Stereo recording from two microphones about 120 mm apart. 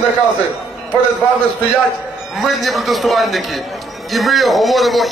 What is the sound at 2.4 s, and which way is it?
A man's voice, centre (ahead or behind).